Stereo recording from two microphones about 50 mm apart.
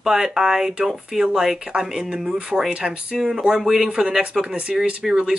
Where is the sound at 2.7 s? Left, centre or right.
Centre.